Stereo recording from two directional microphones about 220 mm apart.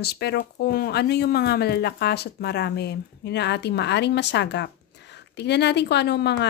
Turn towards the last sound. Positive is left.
turn(degrees=50)  # may be behind; listen again after turning